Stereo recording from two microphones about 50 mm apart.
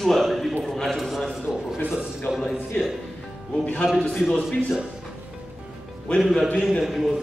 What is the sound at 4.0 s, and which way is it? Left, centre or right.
Speech, centre.